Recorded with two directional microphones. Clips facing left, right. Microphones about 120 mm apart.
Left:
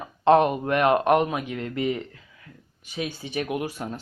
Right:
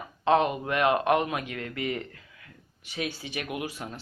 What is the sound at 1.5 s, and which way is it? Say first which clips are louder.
Speech: left 6 dB; 20° left (ahead or behind).